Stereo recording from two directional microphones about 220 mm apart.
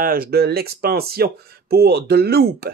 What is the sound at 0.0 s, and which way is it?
Speech, 40° right (ahead or behind).